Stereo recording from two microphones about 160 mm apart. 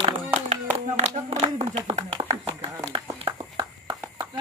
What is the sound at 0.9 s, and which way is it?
Speech, 45° right (ahead or behind).